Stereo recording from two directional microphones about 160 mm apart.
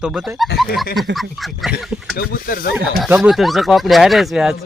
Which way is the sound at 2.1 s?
65° left (ahead or behind).